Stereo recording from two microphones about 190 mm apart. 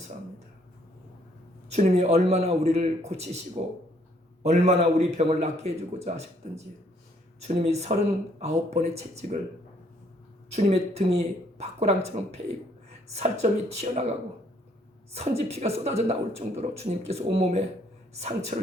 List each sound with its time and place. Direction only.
1.7 s a man's voice: 35° right (ahead or behind)
10.5 s a man's voice: 35° right (ahead or behind)
15.1 s a man's voice: 35° right (ahead or behind)